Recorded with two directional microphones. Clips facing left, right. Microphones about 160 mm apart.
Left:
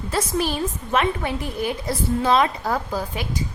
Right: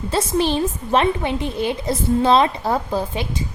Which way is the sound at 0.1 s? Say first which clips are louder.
Right 4 dB; 25° right (ahead or behind).